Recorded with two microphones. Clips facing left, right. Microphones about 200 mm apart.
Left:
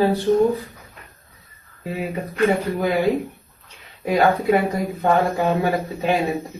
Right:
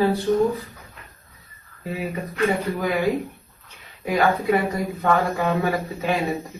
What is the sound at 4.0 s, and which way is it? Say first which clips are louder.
Speech: left 3 dB; 25° left (ahead or behind).